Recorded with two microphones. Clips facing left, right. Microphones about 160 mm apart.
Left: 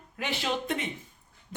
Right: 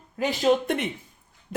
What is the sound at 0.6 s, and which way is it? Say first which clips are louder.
Speech: right 5 dB; 65° right (ahead or behind).